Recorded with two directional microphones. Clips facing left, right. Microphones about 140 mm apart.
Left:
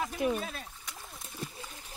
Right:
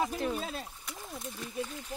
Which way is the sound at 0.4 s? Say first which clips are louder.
Right 1 dB; 15° right (ahead or behind).